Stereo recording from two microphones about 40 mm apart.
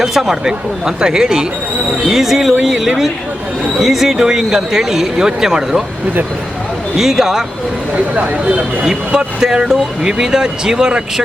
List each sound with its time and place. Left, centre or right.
0.0 s speech: centre
6.9 s speech: centre
7.9 s speech: right
8.8 s speech: centre